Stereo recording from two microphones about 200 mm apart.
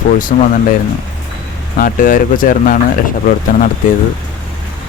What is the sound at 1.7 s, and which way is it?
Speech, 45° left (ahead or behind).